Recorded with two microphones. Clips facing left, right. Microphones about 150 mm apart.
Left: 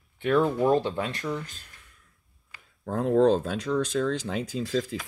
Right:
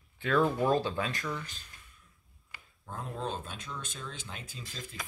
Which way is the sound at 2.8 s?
85° left.